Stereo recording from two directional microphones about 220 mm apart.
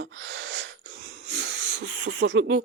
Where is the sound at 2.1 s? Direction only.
55° right (ahead or behind).